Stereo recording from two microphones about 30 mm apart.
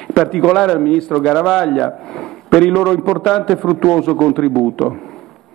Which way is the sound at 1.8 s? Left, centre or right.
Centre.